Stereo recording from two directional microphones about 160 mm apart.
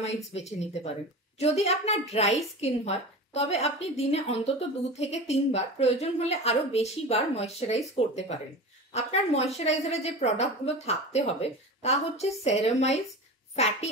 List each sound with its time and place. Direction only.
0.0 s a woman's voice: 45° left (ahead or behind)